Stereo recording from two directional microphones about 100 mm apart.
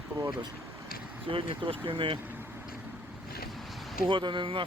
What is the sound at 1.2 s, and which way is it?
Speech, 60° right (ahead or behind).